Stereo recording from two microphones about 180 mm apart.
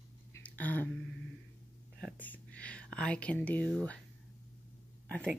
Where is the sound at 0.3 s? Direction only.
10° left (ahead or behind).